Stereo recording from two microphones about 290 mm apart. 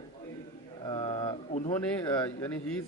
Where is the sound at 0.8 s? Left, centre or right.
Centre.